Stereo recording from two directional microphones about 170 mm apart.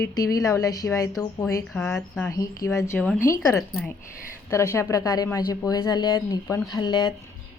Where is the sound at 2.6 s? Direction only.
15° left (ahead or behind).